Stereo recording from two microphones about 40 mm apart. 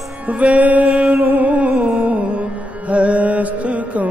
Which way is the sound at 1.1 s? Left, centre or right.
Right.